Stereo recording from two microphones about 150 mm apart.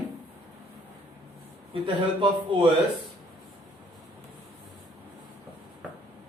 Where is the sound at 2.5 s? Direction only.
35° right (ahead or behind).